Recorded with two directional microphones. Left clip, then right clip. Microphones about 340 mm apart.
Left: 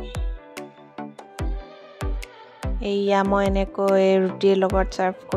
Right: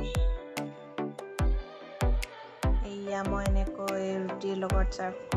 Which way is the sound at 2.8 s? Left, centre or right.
Left.